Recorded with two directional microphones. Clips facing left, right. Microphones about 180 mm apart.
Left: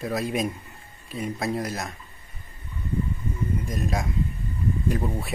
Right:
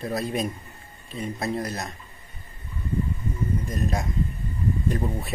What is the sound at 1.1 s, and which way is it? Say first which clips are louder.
Speech: left 1 dB; 10° left (ahead or behind).